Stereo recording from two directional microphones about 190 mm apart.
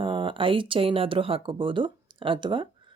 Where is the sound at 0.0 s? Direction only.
25° right (ahead or behind).